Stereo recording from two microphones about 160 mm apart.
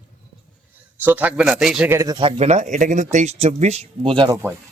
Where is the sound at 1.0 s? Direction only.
10° right (ahead or behind); by 4.2 s 35° right (ahead or behind).